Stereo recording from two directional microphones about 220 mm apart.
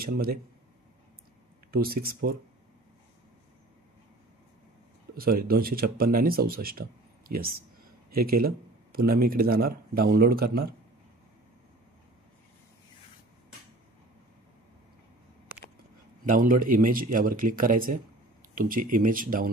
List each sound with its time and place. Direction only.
0.0 s speech: 45° right (ahead or behind)
1.7 s speech: 40° right (ahead or behind)
5.1 s speech: 40° right (ahead or behind)
16.3 s speech: 40° right (ahead or behind)